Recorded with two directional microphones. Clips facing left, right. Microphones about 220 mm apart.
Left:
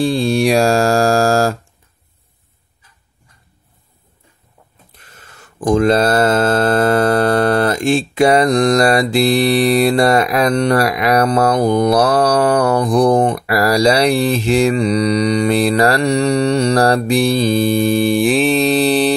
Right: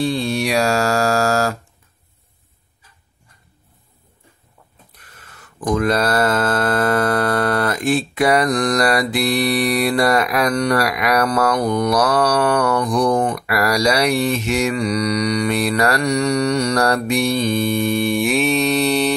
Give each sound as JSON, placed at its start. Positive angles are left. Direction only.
{"t": 0.0, "sound": "mantra", "side_deg": 30}
{"t": 4.9, "sound": "mantra", "side_deg": 25}